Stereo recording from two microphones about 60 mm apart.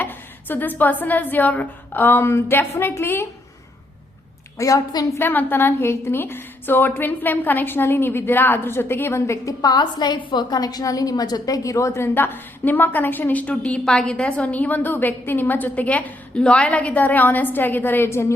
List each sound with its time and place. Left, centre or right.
0.0 s a woman's voice: left
4.5 s a woman's voice: left
5.2 s a woman's voice: left
10.5 s a woman's voice: left
12.0 s a woman's voice: left